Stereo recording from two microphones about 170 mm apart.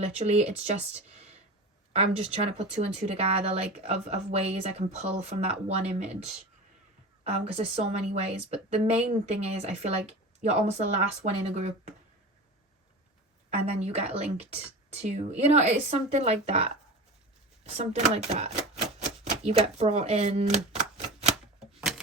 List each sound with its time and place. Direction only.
0.0 s a woman's voice: 40° right (ahead or behind)
13.7 s a woman's voice: 35° right (ahead or behind)
21.8 s a sound: 5° right (ahead or behind)